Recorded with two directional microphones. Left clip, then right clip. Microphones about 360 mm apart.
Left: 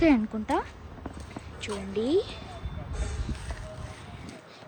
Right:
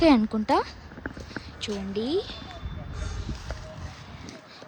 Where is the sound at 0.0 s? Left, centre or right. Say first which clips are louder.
Right 3 dB; centre.